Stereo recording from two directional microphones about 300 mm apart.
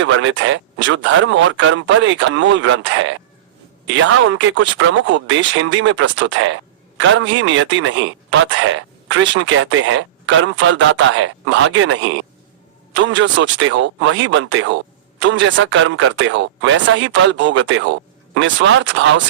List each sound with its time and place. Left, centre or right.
0.0 s speech: right